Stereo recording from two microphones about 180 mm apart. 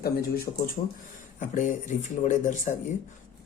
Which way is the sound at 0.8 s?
45° left (ahead or behind).